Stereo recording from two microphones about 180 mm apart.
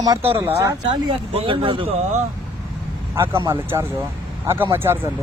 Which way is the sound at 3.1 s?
15° right (ahead or behind).